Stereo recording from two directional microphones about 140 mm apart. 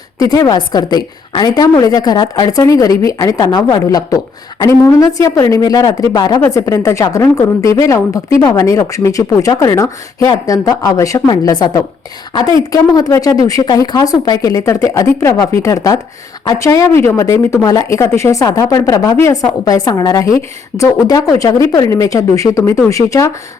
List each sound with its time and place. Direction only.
0.2 s a woman's voice: 25° left (ahead or behind)